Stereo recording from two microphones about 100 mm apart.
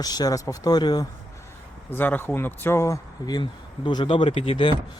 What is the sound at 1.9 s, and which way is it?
Speech, 20° left (ahead or behind).